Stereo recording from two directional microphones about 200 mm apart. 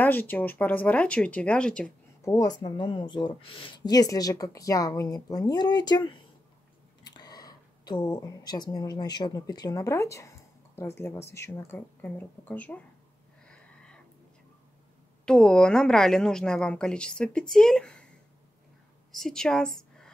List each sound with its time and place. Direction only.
0.0 s speech: 10° left (ahead or behind)
2.2 s speech: 20° left (ahead or behind)
13.5 s a sound: 5° left (ahead or behind)
15.2 s a woman's voice: 5° left (ahead or behind)
19.1 s a woman's voice: centre (ahead or behind)